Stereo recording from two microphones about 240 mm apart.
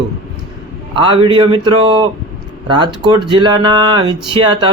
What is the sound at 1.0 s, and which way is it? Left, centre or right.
Speech, right.